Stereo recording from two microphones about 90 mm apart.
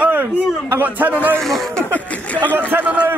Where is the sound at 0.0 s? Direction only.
20° right (ahead or behind).